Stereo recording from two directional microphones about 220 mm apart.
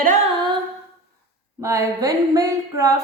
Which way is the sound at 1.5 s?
15° right (ahead or behind).